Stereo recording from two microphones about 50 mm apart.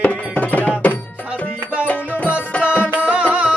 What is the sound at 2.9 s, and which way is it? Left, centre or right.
Music, right.